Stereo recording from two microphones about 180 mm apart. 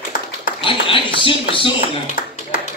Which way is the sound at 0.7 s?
30° left (ahead or behind).